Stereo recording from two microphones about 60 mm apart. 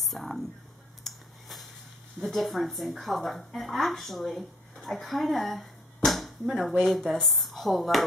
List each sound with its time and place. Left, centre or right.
0.0 s speech: centre
1.0 s a sound: centre
2.1 s a woman's voice: centre